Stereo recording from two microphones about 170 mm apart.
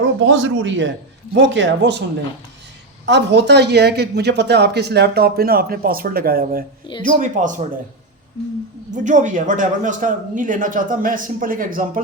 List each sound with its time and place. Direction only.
0.0 s a man's voice: 90° right
3.1 s speech: 90° right; by 6.7 s 60° right (ahead or behind)
7.0 s speech: 50° right (ahead or behind)
9.0 s speech: 50° right (ahead or behind)